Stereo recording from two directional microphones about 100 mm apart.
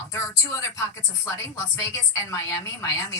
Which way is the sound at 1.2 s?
30° left (ahead or behind).